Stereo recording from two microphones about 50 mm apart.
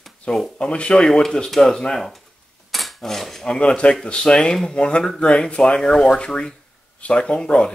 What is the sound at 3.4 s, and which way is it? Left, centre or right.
Speech, centre.